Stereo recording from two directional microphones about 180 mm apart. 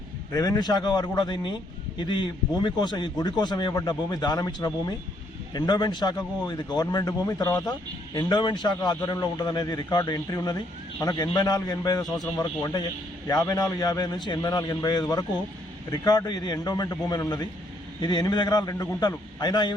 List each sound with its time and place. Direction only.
0.3 s a man's voice: 20° left (ahead or behind)